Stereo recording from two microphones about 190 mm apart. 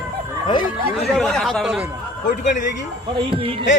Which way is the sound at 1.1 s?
Centre (ahead or behind).